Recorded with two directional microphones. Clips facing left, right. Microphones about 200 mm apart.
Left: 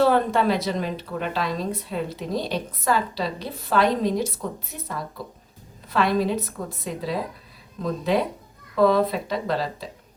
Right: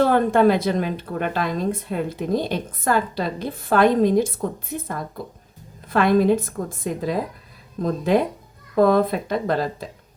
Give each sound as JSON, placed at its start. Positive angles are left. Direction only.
{"t": 0.0, "sound": "a woman's voice", "side_deg": -50}